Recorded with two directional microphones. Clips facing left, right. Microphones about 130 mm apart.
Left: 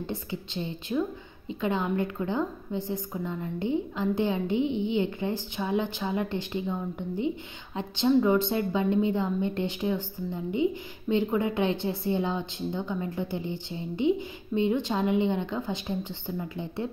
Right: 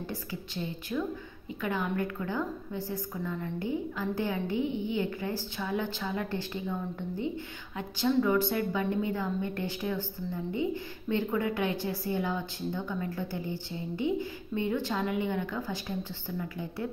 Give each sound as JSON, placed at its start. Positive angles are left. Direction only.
{"t": 0.0, "sound": "a woman's voice", "side_deg": 25}